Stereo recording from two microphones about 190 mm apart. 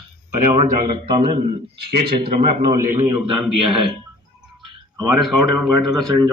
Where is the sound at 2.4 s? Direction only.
25° right (ahead or behind).